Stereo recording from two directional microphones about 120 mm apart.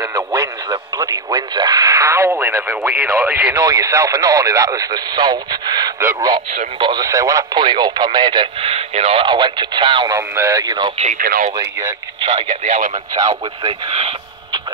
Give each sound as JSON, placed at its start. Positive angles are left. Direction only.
{"t": 0.0, "sound": "radio", "side_deg": -30}
{"t": 2.0, "sound": "speech", "side_deg": -20}
{"t": 3.5, "sound": "speech", "side_deg": -25}
{"t": 7.1, "sound": "speech", "side_deg": -25}
{"t": 7.5, "sound": "speech", "side_deg": -40}
{"t": 10.0, "sound": "speech", "side_deg": -25}
{"t": 11.0, "sound": "speech", "side_deg": -75}
{"t": 12.6, "sound": "speech", "side_deg": -90}
{"t": 13.1, "sound": "speech", "side_deg": -30}
{"t": 13.7, "sound": "speech", "side_deg": -50}